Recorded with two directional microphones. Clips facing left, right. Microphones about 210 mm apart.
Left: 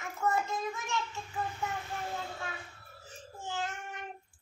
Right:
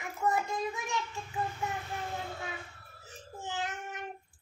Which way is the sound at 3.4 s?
20° right (ahead or behind).